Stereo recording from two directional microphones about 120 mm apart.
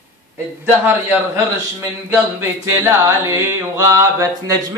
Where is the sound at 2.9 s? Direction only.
25° right (ahead or behind).